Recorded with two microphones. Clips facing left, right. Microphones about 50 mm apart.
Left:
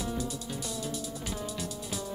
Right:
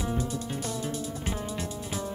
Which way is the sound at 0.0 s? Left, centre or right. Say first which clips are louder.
Right 3 dB; right.